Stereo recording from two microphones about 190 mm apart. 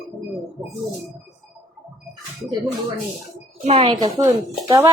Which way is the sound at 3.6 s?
35° right (ahead or behind).